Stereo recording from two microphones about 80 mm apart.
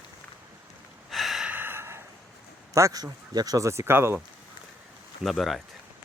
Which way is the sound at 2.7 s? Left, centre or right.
Right.